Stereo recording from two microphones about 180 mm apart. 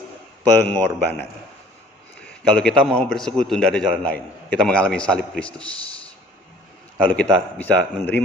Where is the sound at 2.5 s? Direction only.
5° left (ahead or behind).